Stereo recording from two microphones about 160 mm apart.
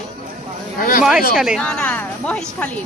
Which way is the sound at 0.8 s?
55° left (ahead or behind).